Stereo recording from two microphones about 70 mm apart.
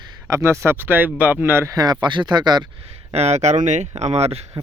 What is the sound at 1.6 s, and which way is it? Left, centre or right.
Speech, right.